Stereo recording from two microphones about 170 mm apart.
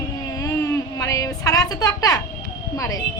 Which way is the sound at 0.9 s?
20° left (ahead or behind).